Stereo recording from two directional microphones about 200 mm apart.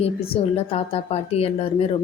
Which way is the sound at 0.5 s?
30° left (ahead or behind).